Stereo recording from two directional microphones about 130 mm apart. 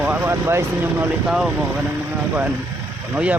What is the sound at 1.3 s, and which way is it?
Speech, 5° right (ahead or behind).